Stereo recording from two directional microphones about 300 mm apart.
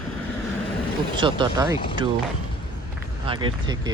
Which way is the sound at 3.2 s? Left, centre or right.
Centre.